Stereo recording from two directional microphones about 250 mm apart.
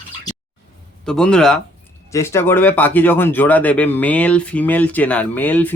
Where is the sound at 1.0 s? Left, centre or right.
Centre.